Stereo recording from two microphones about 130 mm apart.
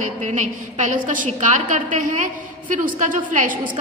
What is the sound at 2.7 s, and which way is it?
Speech, 85° right.